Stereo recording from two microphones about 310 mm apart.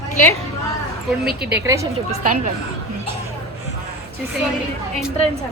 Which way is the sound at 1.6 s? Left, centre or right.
Centre.